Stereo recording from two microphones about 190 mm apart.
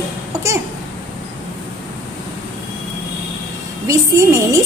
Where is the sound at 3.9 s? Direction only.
15° right (ahead or behind).